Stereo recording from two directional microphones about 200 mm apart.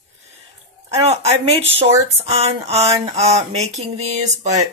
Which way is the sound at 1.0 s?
30° right (ahead or behind).